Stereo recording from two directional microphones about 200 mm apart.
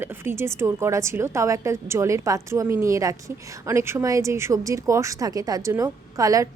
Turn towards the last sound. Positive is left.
turn(degrees=-15)  # may be behind; listen again after turning